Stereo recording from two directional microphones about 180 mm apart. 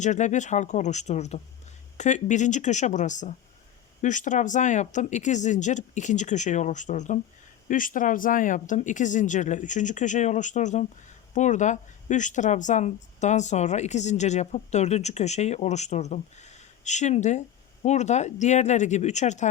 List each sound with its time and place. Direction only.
0.0 s speech: 40° left (ahead or behind)